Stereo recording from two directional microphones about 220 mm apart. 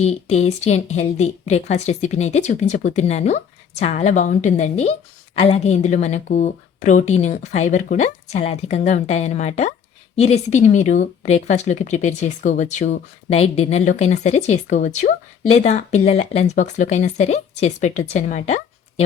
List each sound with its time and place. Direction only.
0.0 s a woman's voice: 30° left (ahead or behind)